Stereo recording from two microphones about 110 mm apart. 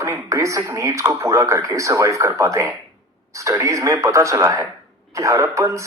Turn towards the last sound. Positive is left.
turn(degrees=-25)  # may be behind; listen again after turning